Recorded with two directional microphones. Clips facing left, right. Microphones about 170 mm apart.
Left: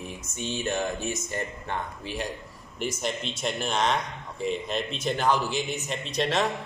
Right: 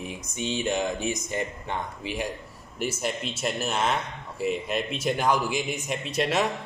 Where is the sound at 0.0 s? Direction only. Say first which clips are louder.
Right 3 dB; 15° right (ahead or behind).